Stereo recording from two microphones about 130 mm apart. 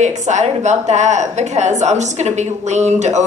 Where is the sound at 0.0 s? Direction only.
65° right (ahead or behind).